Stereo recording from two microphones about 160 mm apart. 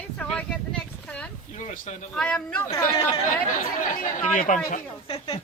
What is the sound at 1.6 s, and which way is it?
Speech, 50° left (ahead or behind).